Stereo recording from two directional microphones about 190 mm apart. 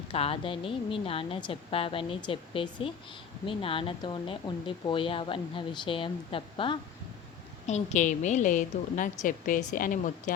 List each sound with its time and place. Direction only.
0.1 s speech: 30° left (ahead or behind)
7.7 s a woman's voice: 40° left (ahead or behind)